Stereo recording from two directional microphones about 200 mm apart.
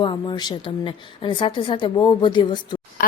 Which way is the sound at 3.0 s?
45° left (ahead or behind).